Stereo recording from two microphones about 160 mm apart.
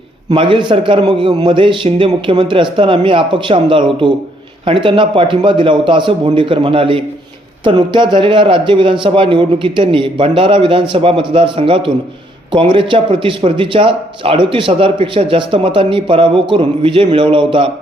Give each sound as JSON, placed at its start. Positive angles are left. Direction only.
{"t": 0.3, "sound": "a man's voice", "side_deg": -30}